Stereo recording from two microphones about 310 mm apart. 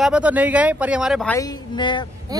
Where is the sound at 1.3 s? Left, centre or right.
Centre.